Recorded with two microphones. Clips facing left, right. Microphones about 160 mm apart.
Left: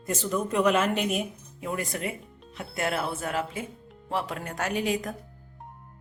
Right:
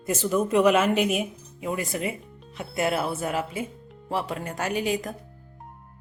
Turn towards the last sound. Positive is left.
turn(degrees=0)  # may be behind; listen again after turning